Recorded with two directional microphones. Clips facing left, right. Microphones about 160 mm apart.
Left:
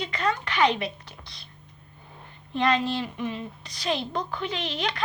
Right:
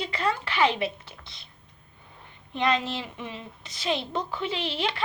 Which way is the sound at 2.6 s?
20° right (ahead or behind).